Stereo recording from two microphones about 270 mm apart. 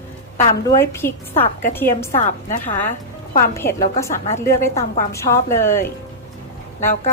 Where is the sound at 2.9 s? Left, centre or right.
Left.